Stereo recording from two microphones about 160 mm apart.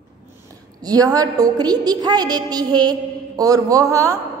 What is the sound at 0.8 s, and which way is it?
A woman's voice, 25° right (ahead or behind).